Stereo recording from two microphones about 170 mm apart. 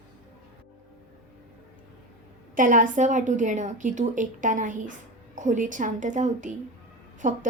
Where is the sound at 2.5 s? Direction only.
50° right (ahead or behind).